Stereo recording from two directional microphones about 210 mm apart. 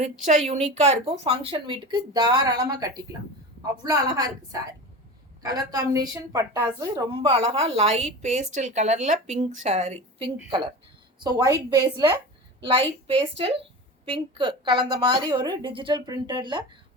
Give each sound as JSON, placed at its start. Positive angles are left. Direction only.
{"t": 0.0, "sound": "a woman's voice", "side_deg": -30}
{"t": 11.2, "sound": "a woman's voice", "side_deg": -20}